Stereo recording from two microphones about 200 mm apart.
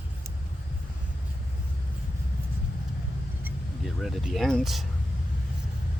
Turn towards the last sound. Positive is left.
turn(degrees=0)  # may be behind; listen again after turning